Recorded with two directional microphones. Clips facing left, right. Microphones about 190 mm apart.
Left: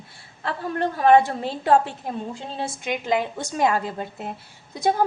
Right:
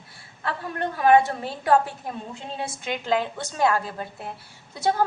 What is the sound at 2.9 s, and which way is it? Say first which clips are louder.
A woman's voice: left 1 dB; 15° left (ahead or behind).